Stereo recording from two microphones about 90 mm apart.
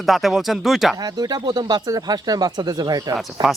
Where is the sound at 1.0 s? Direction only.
45° right (ahead or behind).